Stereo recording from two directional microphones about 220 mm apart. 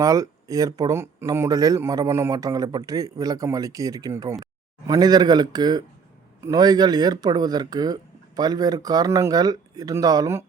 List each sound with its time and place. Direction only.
0.0 s speech: 15° right (ahead or behind)